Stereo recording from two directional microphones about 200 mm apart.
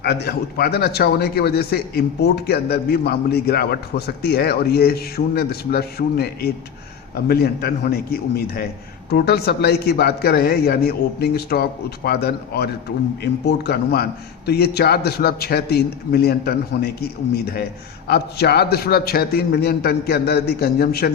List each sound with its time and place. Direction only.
0.0 s speech: 55° left (ahead or behind)